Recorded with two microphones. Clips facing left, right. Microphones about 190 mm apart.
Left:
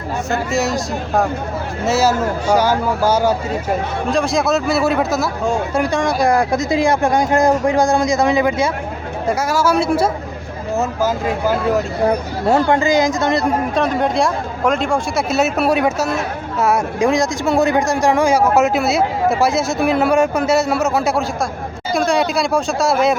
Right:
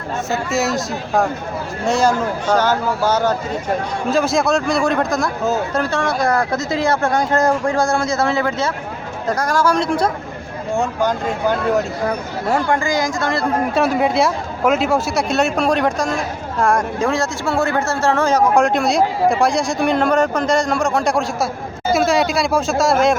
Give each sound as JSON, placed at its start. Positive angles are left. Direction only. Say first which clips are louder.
{"t": 0.3, "sound": "speech", "louder": "left 1 dB", "side_deg": 0}
{"t": 4.1, "sound": "speech", "louder": "even", "side_deg": 0}
{"t": 12.0, "sound": "speech", "louder": "left 4 dB", "side_deg": 25}
{"t": 13.7, "sound": "speech", "louder": "right 3 dB", "side_deg": -5}